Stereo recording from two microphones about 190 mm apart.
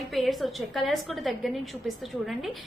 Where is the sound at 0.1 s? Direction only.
Centre (ahead or behind).